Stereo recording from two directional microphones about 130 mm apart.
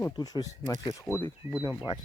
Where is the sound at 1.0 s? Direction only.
15° left (ahead or behind).